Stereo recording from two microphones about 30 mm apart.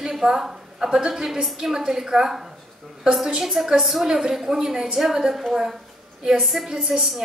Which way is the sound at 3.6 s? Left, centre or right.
Centre.